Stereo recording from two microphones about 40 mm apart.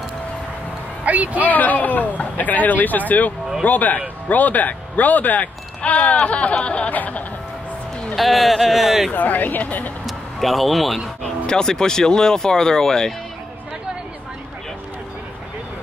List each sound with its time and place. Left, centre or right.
1.0 s speech: right
1.4 s a man's voice: left
5.9 s speech: left
6.9 s speech: left
8.2 s speech: centre
9.1 s a man's voice: left
10.0 s a sound: centre
11.2 s speech: centre